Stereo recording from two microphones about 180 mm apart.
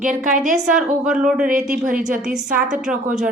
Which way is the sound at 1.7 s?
45° right (ahead or behind).